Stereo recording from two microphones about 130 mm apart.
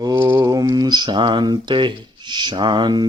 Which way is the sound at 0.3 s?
30° right (ahead or behind).